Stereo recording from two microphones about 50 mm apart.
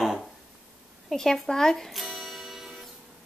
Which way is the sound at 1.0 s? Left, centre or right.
Centre.